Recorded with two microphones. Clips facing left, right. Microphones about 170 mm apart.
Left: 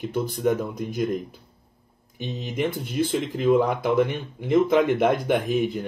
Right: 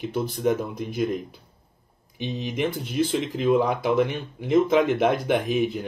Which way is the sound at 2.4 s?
50° left (ahead or behind).